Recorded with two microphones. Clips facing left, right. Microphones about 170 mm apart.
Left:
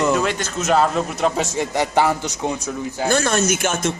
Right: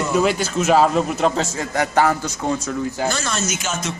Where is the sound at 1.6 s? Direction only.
20° left (ahead or behind).